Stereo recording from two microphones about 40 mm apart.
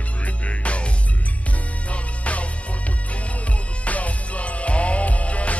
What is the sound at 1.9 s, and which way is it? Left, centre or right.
Music, left.